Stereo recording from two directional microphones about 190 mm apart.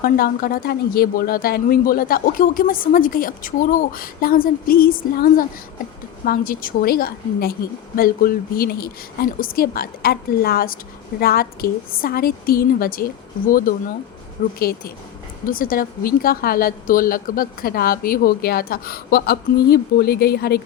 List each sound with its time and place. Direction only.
0.0 s speech: 50° left (ahead or behind)